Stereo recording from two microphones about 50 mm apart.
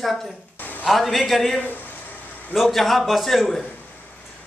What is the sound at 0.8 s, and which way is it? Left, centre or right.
Speech, centre.